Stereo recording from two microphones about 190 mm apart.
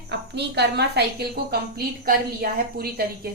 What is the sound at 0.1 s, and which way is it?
A woman's voice, 60° right (ahead or behind).